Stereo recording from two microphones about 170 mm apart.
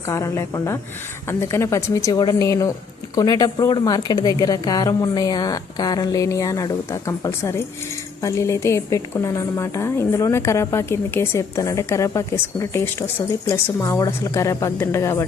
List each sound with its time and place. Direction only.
0.1 s a woman's voice: 15° left (ahead or behind)